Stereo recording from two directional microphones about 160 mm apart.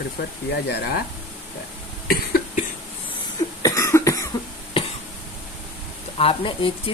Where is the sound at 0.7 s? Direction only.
90° left.